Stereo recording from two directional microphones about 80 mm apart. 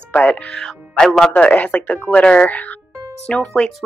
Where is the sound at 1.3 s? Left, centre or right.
Centre.